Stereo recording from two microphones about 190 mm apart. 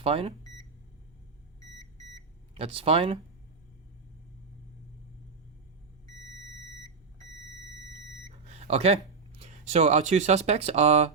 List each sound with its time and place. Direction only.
0.0 s speech: 30° right (ahead or behind)
0.4 s microwave oven: 20° left (ahead or behind)
2.6 s speech: 30° right (ahead or behind)
8.3 s smoke detector: 35° right (ahead or behind)
9.4 s speech: 35° right (ahead or behind)